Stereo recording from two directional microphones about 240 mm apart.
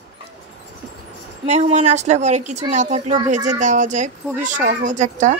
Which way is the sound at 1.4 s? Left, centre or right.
Right.